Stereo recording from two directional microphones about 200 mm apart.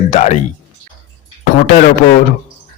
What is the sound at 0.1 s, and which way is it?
Speech, 35° left (ahead or behind).